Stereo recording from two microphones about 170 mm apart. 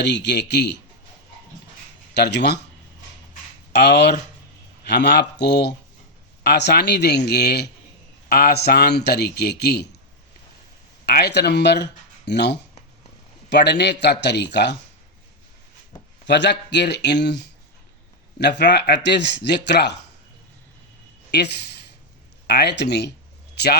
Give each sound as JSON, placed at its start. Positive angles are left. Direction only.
{"t": 0.0, "sound": "speech", "side_deg": 90}
{"t": 2.1, "sound": "a man's voice", "side_deg": 75}
{"t": 3.7, "sound": "a man's voice", "side_deg": 80}
{"t": 11.0, "sound": "speech", "side_deg": 70}
{"t": 16.2, "sound": "speech", "side_deg": 90}
{"t": 21.2, "sound": "speech", "side_deg": 75}